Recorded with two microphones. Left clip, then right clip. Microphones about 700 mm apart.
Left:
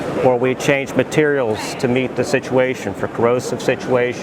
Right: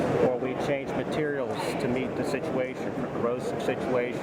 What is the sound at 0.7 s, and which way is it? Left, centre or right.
Speech, left.